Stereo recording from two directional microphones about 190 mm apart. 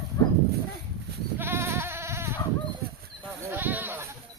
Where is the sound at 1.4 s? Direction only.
10° right (ahead or behind).